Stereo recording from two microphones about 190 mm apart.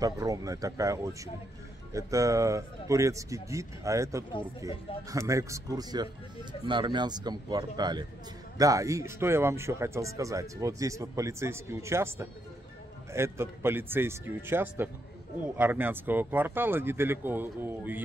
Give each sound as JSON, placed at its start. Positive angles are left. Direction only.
{"t": 0.0, "sound": "speech", "side_deg": -20}